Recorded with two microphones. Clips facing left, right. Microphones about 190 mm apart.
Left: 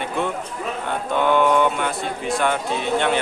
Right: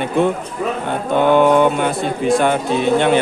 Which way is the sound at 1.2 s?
20° right (ahead or behind).